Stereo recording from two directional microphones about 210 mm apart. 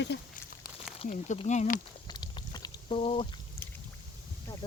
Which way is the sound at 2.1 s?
20° left (ahead or behind).